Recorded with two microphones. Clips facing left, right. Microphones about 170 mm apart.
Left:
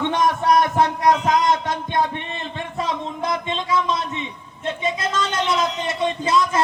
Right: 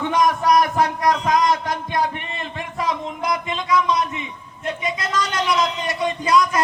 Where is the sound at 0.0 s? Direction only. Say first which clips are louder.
Right 1 dB; 25° left (ahead or behind).